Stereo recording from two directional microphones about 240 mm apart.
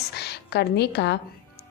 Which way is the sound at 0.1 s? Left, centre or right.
Left.